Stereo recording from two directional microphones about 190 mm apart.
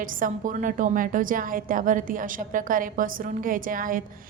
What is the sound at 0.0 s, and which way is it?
A woman's voice, 45° right (ahead or behind).